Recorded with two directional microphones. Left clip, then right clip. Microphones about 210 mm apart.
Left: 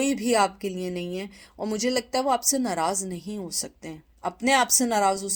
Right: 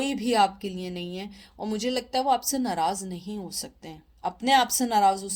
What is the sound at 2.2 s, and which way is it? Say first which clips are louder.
A woman's voice: left 1 dB; 35° left (ahead or behind).